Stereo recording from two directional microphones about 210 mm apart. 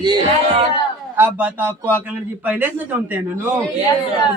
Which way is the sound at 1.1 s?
10° right (ahead or behind).